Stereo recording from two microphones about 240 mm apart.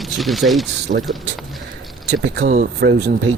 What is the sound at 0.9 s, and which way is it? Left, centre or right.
Speech, right.